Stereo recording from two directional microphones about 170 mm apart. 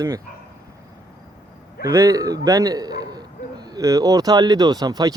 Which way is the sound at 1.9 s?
20° right (ahead or behind).